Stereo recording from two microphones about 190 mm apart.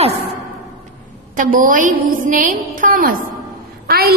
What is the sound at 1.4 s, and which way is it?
A woman's voice, 45° right (ahead or behind).